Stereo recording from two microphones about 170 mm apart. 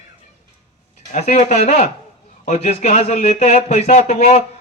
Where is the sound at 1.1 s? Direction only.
40° left (ahead or behind).